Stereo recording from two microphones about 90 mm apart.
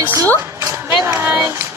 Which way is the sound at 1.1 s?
25° right (ahead or behind).